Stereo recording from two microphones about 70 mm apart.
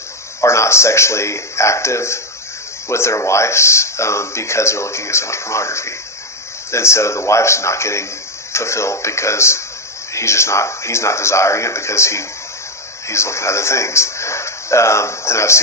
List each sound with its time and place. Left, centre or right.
0.4 s speech: left